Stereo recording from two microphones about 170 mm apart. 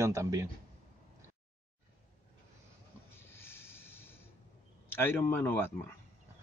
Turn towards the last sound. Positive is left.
turn(degrees=10)  # may be behind; listen again after turning